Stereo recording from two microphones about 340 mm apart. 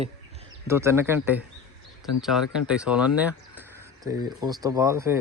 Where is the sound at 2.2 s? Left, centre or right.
Centre.